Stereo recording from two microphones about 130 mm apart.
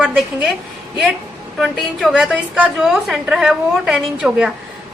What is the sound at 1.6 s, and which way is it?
A woman's voice, centre (ahead or behind).